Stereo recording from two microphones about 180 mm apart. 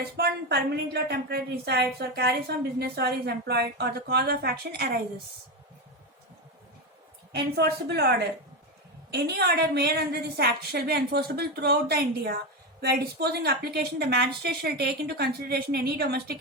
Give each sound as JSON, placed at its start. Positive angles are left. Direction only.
{"t": 0.2, "sound": "a woman's voice", "side_deg": -65}
{"t": 7.3, "sound": "a woman's voice", "side_deg": -65}